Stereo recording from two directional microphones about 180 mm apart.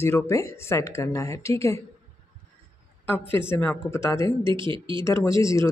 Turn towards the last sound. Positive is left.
turn(degrees=15)  # may be behind; listen again after turning